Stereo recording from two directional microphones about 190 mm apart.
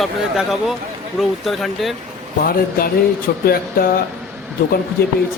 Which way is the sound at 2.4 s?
50° left (ahead or behind).